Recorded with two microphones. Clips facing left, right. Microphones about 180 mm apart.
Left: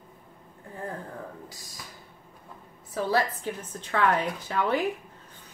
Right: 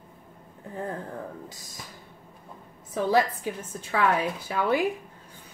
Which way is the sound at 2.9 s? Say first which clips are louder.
Right 3 dB; 15° right (ahead or behind).